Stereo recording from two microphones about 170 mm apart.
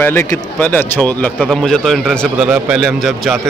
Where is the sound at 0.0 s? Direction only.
15° left (ahead or behind).